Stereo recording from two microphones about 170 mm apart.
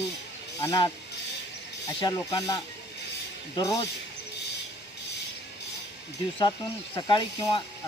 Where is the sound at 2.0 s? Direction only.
20° left (ahead or behind).